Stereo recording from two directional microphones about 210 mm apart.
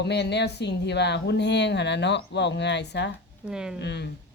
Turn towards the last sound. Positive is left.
turn(degrees=55)  # may be behind; listen again after turning